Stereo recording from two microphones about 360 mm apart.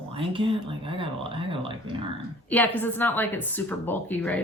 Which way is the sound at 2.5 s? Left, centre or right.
Centre.